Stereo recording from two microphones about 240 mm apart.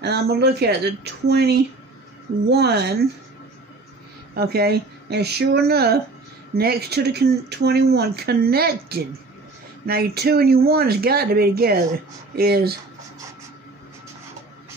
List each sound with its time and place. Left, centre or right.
0.0 s speech: right
4.4 s speech: right